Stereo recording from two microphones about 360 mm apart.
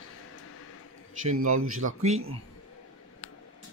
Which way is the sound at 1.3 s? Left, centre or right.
Right.